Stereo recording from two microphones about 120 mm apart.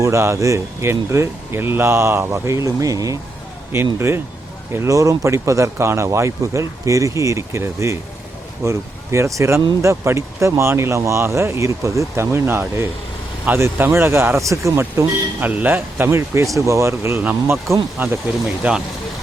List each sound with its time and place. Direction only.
0.0 s speech: 25° right (ahead or behind)
4.7 s speech: 25° right (ahead or behind); by 18.8 s 5° right (ahead or behind)